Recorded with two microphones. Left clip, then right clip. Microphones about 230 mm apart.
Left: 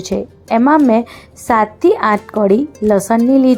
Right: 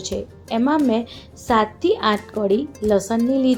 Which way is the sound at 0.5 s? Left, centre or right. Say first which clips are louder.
Left 8 dB; left.